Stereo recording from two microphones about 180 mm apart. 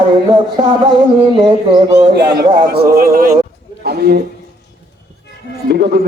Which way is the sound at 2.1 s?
60° right (ahead or behind).